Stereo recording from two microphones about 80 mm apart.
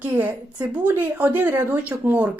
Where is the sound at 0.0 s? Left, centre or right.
Right.